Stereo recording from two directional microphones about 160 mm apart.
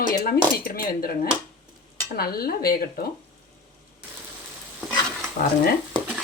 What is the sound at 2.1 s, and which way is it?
Speech, 70° left (ahead or behind).